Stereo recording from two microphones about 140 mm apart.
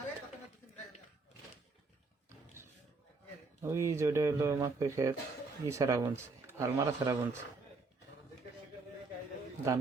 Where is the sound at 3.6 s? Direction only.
20° right (ahead or behind).